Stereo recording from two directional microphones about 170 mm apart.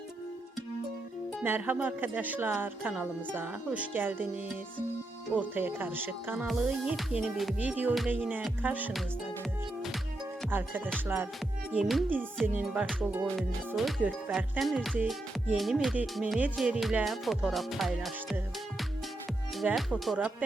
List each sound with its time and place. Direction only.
1.4 s speech: 10° right (ahead or behind)
5.3 s speech: 10° right (ahead or behind)
6.5 s music: 5° right (ahead or behind)
10.5 s speech: 10° right (ahead or behind)
12.5 s music: 5° right (ahead or behind)